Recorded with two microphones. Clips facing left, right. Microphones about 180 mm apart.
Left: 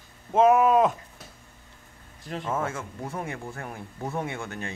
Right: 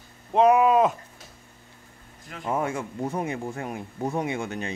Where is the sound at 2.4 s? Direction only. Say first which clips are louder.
Right 4 dB; 15° right (ahead or behind).